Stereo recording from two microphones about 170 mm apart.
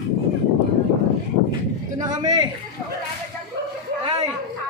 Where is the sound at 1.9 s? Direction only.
25° right (ahead or behind).